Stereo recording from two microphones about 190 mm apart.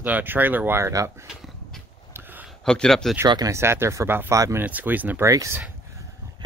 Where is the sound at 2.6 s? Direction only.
5° left (ahead or behind).